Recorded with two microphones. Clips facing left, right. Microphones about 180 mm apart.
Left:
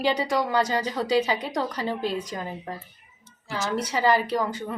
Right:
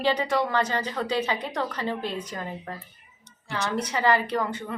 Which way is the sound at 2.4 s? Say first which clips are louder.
Left 1 dB; 15° left (ahead or behind).